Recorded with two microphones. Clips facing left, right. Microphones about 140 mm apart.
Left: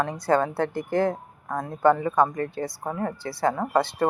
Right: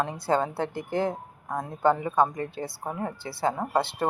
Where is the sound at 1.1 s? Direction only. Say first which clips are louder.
Left 2 dB; 10° right (ahead or behind).